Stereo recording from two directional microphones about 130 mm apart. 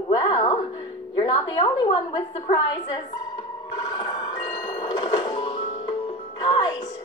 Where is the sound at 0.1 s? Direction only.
40° left (ahead or behind).